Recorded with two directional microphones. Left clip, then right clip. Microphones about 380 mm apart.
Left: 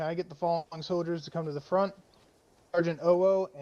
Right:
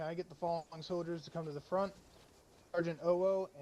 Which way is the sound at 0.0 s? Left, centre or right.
Left.